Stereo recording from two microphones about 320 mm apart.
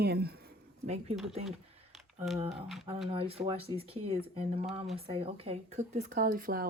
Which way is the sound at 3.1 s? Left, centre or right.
Centre.